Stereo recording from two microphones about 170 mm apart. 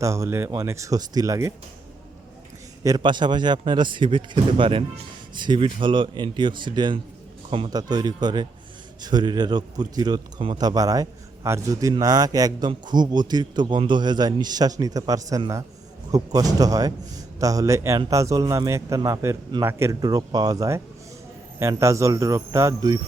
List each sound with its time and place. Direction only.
0.0 s speech: 15° right (ahead or behind)
2.8 s a man's voice: 25° right (ahead or behind)